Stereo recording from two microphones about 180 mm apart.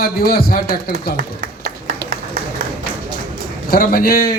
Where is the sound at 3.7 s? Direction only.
55° left (ahead or behind).